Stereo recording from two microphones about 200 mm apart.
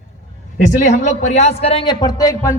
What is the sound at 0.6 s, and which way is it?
A man's voice, 35° left (ahead or behind).